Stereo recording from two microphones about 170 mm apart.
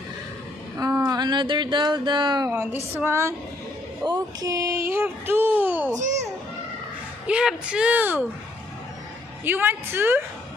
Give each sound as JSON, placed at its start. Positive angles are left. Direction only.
{"t": 0.7, "sound": "speech", "side_deg": -20}
{"t": 2.5, "sound": "speech", "side_deg": -10}
{"t": 5.9, "sound": "a child's voice", "side_deg": -45}
{"t": 7.2, "sound": "speech", "side_deg": -5}
{"t": 9.4, "sound": "speech", "side_deg": -10}